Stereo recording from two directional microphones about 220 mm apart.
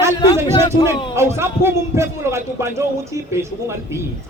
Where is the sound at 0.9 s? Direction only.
10° right (ahead or behind).